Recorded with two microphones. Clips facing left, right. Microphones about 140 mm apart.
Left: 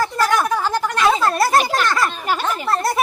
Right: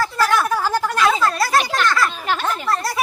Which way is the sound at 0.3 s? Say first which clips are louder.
Even; 15° left (ahead or behind).